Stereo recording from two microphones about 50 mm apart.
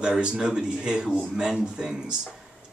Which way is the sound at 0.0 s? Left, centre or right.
Centre.